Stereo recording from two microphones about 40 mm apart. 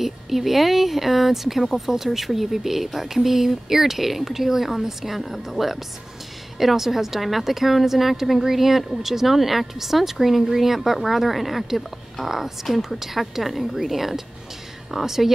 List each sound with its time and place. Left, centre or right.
0.0 s a woman's voice: centre